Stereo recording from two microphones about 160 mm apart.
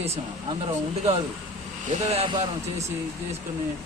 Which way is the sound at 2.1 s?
35° right (ahead or behind).